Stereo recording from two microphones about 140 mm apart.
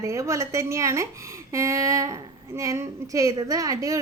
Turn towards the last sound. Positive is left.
turn(degrees=-25)  # may be behind; listen again after turning